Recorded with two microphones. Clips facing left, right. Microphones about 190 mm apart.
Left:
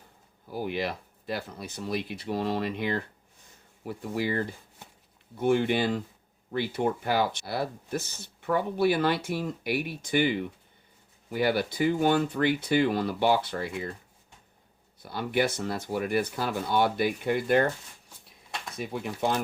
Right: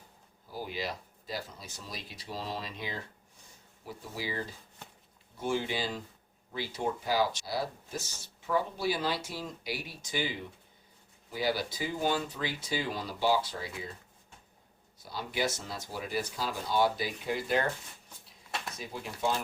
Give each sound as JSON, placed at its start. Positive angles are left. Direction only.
{"t": 0.5, "sound": "speech", "side_deg": 60}
{"t": 15.0, "sound": "speech", "side_deg": 60}
{"t": 18.8, "sound": "speech", "side_deg": 60}